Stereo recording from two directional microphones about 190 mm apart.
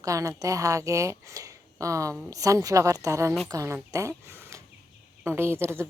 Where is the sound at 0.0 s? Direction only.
15° right (ahead or behind).